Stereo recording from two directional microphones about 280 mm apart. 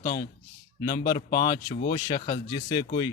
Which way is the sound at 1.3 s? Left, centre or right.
Left.